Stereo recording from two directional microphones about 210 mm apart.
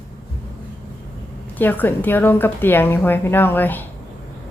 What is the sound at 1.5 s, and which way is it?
A woman's voice, 10° left (ahead or behind).